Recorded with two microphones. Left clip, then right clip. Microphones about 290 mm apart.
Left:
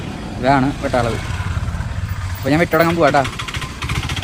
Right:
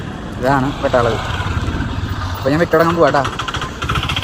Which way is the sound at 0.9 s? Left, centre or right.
Centre.